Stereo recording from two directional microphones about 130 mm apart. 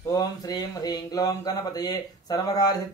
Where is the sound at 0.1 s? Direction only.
30° left (ahead or behind).